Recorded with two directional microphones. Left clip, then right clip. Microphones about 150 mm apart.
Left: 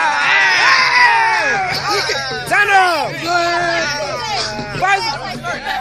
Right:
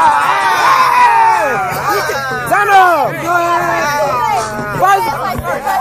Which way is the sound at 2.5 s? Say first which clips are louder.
Right 4 dB; 50° left (ahead or behind).